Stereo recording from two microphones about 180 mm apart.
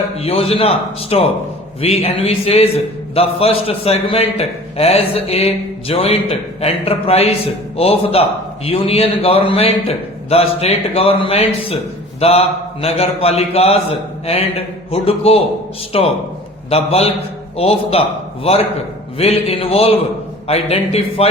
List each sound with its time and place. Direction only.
0.2 s a man's voice: 35° left (ahead or behind)
19.2 s a man's voice: 35° left (ahead or behind)